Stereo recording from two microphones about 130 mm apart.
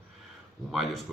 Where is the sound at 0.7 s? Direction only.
Centre (ahead or behind).